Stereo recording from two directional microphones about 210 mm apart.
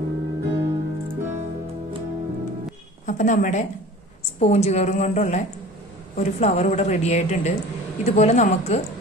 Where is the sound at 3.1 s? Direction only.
35° left (ahead or behind).